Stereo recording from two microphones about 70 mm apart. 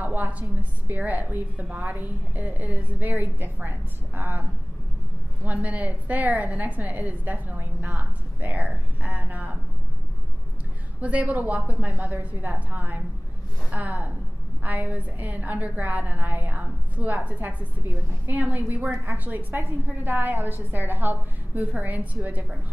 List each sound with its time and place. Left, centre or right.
0.0 s a woman's voice: right
11.0 s a woman's voice: centre